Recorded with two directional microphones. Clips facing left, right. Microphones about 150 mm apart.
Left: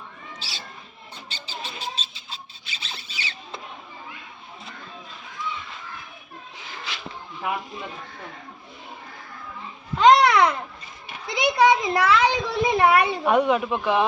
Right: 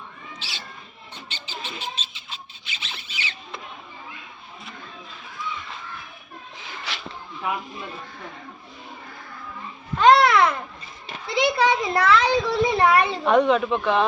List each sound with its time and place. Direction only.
0.3 s cat: 40° left (ahead or behind)
1.3 s a sound: 40° left (ahead or behind)
10.0 s babbling: 15° left (ahead or behind)
11.3 s a child's voice: 15° left (ahead or behind)